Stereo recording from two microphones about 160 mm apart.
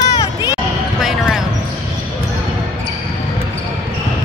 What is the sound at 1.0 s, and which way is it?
Basketball bounce, centre (ahead or behind).